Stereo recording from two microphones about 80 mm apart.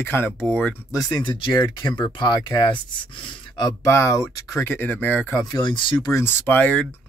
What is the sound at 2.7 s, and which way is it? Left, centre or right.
Speech, left.